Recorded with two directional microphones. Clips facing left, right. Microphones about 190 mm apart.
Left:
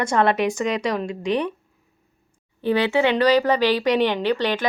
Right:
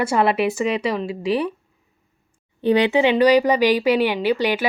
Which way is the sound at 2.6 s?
20° right (ahead or behind).